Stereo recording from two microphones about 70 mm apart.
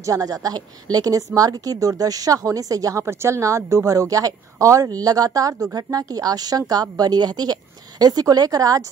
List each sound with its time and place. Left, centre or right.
0.0 s a woman's voice: right
3.1 s a woman's voice: right